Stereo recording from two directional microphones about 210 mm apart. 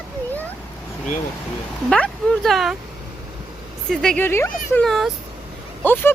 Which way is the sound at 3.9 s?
5° left (ahead or behind).